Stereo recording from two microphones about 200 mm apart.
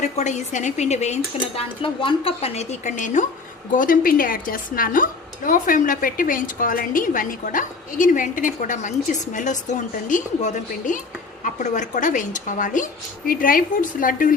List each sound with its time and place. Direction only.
0.0 s a woman's voice: 35° left (ahead or behind)